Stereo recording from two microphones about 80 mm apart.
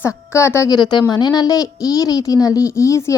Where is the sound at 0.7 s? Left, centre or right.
Left.